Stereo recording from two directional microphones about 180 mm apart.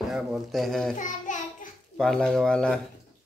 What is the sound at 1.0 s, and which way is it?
Child singing, 45° left (ahead or behind).